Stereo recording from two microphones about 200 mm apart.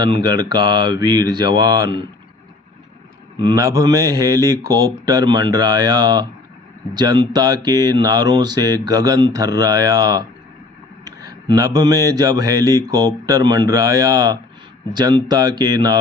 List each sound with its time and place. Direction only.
0.0 s speech: 20° right (ahead or behind)
3.3 s speech: 20° right (ahead or behind)